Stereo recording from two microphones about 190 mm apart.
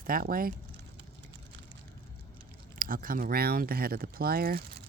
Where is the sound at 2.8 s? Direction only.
50° right (ahead or behind).